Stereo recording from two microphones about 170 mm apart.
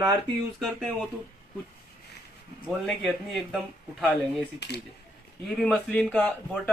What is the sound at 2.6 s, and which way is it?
Speech, centre (ahead or behind).